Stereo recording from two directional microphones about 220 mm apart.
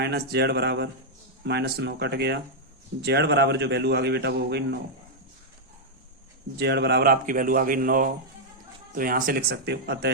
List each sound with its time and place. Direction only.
0.0 s a man's voice: 45° right (ahead or behind)
6.6 s a man's voice: 50° right (ahead or behind)